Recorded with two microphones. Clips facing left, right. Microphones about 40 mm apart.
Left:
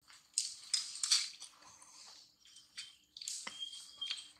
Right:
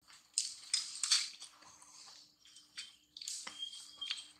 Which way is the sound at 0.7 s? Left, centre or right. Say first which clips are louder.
Even; centre.